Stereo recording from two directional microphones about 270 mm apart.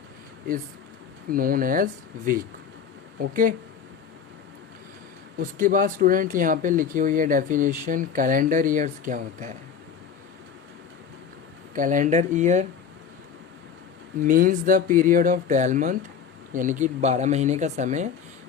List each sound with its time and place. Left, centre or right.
1.3 s speech: right
5.4 s speech: right
11.7 s speech: right
14.2 s speech: right